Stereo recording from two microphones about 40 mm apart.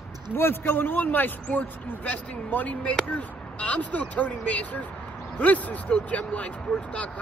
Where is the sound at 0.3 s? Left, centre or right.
Left.